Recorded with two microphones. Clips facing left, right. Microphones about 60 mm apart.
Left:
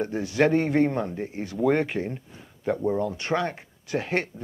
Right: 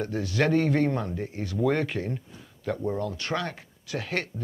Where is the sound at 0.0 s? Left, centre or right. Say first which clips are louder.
Left 3 dB; left.